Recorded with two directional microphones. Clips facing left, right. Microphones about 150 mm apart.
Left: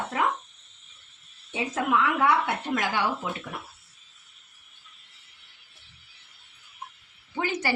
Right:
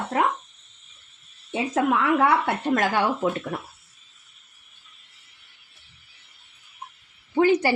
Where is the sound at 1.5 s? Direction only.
60° right (ahead or behind).